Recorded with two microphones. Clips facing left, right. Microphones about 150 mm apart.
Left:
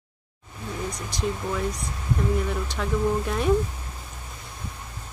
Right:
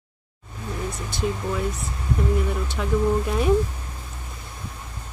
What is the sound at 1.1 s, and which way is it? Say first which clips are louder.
Speech: right 2 dB; 5° right (ahead or behind).